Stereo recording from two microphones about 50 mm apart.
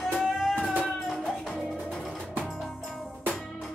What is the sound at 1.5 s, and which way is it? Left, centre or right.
Music, centre.